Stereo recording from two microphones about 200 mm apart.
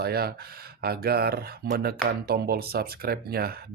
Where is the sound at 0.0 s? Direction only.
50° right (ahead or behind).